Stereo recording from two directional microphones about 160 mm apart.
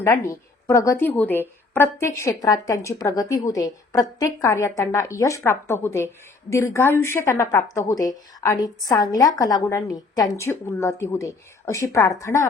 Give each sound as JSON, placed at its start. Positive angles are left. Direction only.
{"t": 0.0, "sound": "a woman's voice", "side_deg": 20}